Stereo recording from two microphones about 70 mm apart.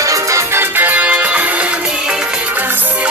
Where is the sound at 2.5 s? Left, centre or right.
Right.